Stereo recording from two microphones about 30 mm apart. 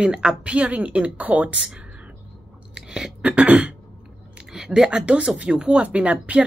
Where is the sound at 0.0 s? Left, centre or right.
Right.